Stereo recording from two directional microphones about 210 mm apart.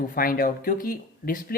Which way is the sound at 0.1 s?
45° left (ahead or behind).